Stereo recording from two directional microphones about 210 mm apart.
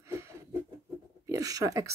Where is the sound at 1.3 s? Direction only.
15° right (ahead or behind).